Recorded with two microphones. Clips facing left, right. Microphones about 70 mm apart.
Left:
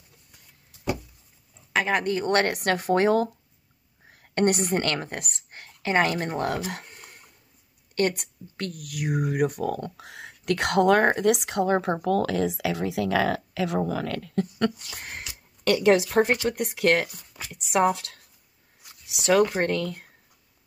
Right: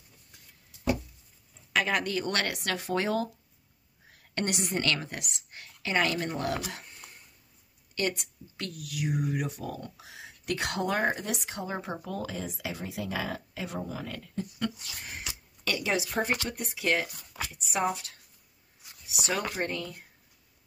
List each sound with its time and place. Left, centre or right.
1.7 s speech: left
4.1 s whispering: left
4.8 s speech: left
8.2 s speech: left
15.1 s a sound: left
16.4 s speech: left
17.5 s speech: left
17.9 s speech: left